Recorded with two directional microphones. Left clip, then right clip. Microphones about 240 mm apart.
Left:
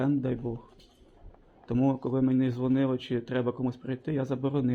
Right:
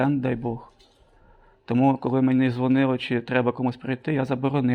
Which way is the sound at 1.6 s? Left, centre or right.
Right.